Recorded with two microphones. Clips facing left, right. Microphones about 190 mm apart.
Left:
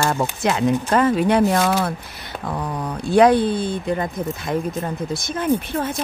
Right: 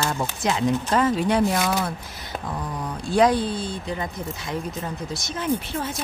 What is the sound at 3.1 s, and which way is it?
Speech, 60° left (ahead or behind).